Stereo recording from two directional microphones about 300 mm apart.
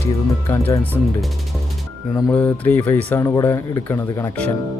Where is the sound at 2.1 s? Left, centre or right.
Centre.